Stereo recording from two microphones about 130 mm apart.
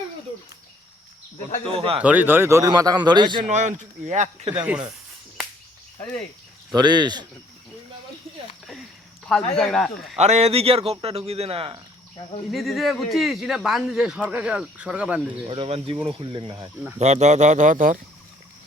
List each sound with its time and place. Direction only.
1.6 s speech: 45° right (ahead or behind)
2.0 s a man's voice: 10° right (ahead or behind); by 3.4 s 35° right (ahead or behind)
3.5 s speech: 65° right (ahead or behind)
6.7 s speech: 35° right (ahead or behind)
9.6 s speech: 5° left (ahead or behind)
10.2 s speech: 55° right (ahead or behind)
12.5 s speech: centre (ahead or behind)
15.4 s speech: 45° right (ahead or behind)
17.0 s speech: 60° right (ahead or behind); by 18.0 s 85° right